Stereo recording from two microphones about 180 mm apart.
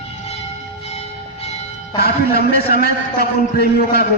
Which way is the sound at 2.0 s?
60° left (ahead or behind).